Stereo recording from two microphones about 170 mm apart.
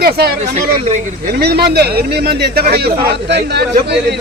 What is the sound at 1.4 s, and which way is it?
Speech, 70° right (ahead or behind).